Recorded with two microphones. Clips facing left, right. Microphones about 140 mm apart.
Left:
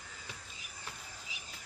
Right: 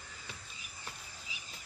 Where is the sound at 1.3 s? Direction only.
70° left (ahead or behind).